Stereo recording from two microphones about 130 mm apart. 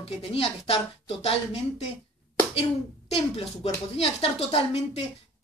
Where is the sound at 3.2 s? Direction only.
50° left (ahead or behind).